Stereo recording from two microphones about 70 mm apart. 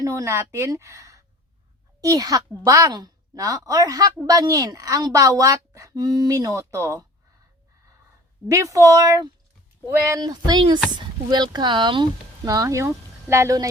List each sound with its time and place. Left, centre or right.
0.0 s a woman's voice: right
6.0 s a woman's voice: right
8.4 s a woman's voice: right
9.8 s speech: right
10.2 s speech: right
12.6 s speech: right